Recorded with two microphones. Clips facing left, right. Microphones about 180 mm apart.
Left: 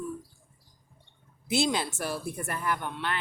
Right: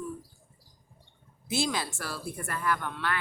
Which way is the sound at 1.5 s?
25° left (ahead or behind).